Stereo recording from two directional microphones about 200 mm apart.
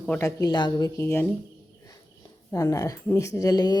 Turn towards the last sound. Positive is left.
turn(degrees=20)  # may be behind; listen again after turning